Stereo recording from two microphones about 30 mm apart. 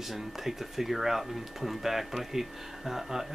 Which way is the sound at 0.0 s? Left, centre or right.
Centre.